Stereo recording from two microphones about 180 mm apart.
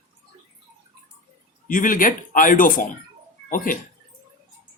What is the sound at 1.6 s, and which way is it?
Speech, 50° left (ahead or behind).